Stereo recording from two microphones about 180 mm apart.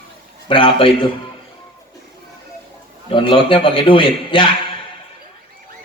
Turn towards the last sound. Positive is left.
turn(degrees=30)  # may be behind; listen again after turning